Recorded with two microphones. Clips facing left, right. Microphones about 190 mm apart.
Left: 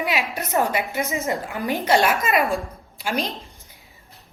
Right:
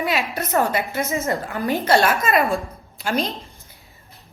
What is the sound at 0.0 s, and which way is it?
A woman's voice, 15° left (ahead or behind).